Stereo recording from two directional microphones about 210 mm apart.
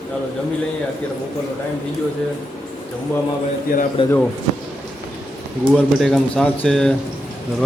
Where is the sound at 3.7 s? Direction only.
40° left (ahead or behind).